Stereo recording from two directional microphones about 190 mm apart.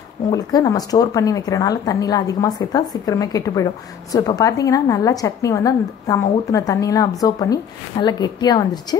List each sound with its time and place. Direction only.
0.3 s speech: 20° left (ahead or behind)